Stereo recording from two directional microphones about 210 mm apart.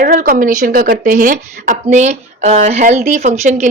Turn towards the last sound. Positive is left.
turn(degrees=-35)  # may be behind; listen again after turning